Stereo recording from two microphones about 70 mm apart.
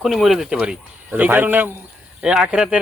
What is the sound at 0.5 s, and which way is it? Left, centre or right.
Speech, centre.